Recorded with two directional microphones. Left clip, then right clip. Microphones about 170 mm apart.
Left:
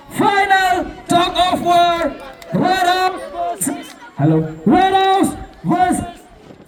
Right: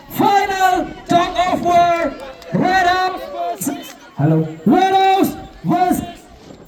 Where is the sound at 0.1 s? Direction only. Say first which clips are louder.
Left 1 dB; 60° right (ahead or behind).